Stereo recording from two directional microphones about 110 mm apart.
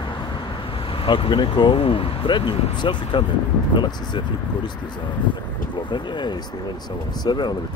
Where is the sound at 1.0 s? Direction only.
55° left (ahead or behind).